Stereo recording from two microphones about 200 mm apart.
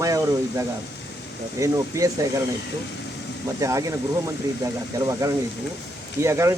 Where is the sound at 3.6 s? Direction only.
15° right (ahead or behind).